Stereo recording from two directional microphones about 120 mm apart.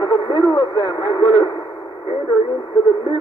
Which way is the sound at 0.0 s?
35° left (ahead or behind).